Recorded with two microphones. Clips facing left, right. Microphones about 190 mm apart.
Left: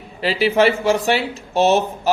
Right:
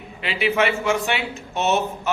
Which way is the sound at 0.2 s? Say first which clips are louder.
Left 5 dB; 35° left (ahead or behind).